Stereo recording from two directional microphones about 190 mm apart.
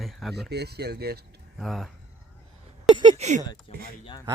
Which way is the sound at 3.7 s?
30° left (ahead or behind).